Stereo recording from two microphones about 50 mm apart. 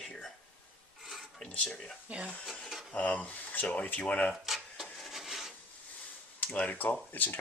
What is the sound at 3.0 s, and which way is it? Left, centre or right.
Speech, left.